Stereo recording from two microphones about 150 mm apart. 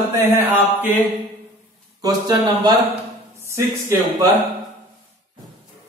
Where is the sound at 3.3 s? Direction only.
20° right (ahead or behind).